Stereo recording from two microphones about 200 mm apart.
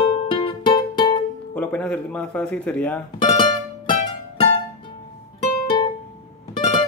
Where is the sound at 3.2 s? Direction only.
25° left (ahead or behind).